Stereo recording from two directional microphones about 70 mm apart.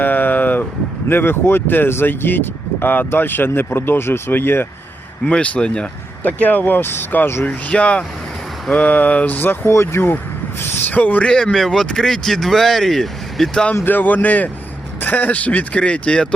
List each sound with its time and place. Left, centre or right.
0.0 s vehicle: left
1.0 s speech: left
5.2 s speech: centre
7.4 s speech: centre
11.3 s speech: centre
13.5 s speech: centre
13.8 s speech: left